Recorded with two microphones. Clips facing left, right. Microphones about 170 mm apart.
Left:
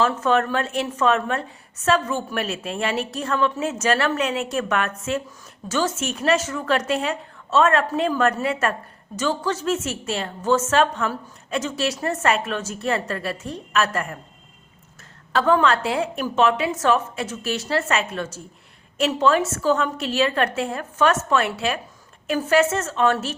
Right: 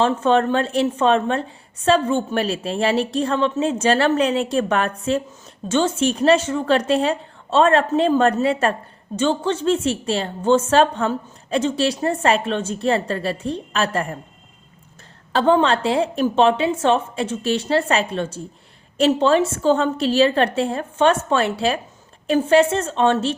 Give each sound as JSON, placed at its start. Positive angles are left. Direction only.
{"t": 0.0, "sound": "a woman's voice", "side_deg": -30}
{"t": 15.3, "sound": "a woman's voice", "side_deg": -30}